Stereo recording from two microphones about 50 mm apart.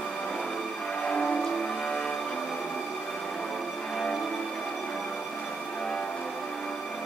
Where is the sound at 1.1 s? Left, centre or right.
Centre.